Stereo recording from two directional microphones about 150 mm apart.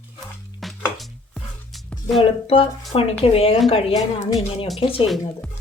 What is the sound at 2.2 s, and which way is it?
Speech, 40° left (ahead or behind).